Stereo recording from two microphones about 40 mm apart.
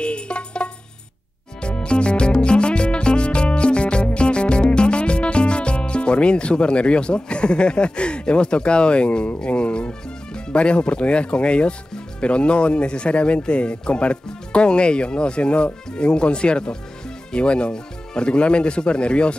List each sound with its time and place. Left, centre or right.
0.0 s music: left
9.5 s speech: left